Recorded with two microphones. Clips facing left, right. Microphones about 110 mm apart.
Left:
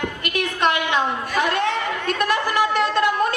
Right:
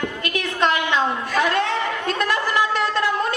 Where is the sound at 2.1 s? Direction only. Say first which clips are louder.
Left 1 dB; 15° left (ahead or behind).